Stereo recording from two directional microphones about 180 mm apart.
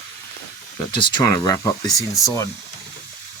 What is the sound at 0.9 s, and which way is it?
Speech, 25° left (ahead or behind).